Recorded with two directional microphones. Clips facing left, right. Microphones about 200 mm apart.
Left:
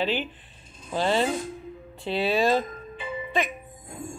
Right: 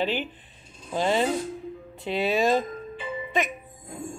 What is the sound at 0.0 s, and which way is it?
Speech, 15° right (ahead or behind).